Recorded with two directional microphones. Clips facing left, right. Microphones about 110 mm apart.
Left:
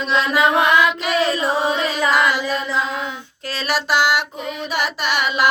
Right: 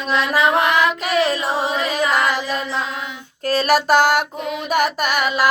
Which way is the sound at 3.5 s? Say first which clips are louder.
Right 6 dB; 45° right (ahead or behind).